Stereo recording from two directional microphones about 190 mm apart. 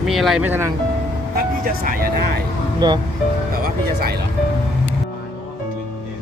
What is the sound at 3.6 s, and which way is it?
Speech, 55° right (ahead or behind).